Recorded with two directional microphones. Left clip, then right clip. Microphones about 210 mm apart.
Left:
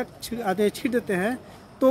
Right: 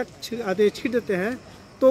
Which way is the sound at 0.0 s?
55° left (ahead or behind).